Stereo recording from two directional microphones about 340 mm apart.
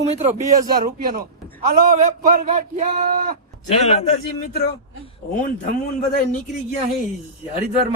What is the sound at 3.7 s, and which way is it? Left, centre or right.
Speech, centre.